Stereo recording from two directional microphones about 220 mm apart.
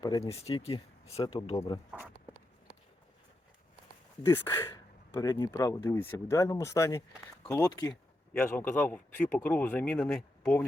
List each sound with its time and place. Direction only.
0.0 s a man's voice: 20° left (ahead or behind)
1.9 s speech: 5° right (ahead or behind)
4.3 s a man's voice: 10° left (ahead or behind)